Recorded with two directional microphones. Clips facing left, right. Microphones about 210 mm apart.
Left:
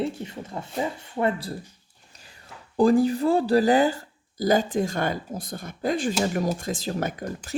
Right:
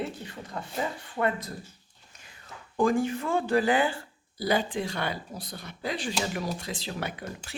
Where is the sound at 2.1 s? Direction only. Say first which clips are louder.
Left 2 dB; 35° left (ahead or behind).